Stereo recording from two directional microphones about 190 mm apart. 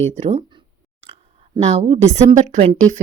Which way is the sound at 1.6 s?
30° right (ahead or behind).